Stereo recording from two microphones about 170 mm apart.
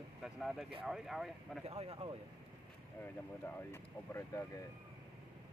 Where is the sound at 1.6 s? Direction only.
35° right (ahead or behind).